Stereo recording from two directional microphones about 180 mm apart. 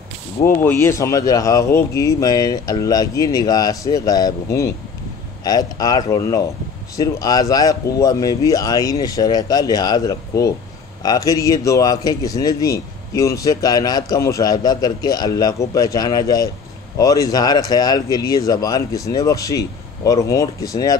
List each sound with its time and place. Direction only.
0.4 s a man's voice: 15° left (ahead or behind)